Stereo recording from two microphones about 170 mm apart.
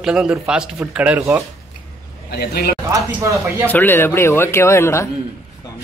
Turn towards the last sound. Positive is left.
turn(degrees=15)  # may be behind; listen again after turning